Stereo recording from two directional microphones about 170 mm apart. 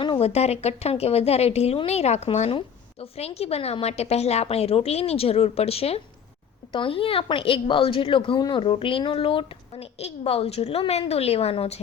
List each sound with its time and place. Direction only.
0.0 s speech: 35° left (ahead or behind)